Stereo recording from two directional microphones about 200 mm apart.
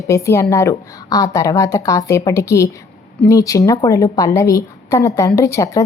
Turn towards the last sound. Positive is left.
turn(degrees=15)  # may be behind; listen again after turning